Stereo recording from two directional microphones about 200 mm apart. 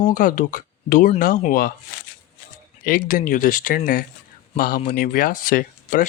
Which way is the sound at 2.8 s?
45° left (ahead or behind).